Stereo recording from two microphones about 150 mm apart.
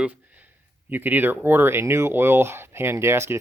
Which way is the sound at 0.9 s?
10° right (ahead or behind).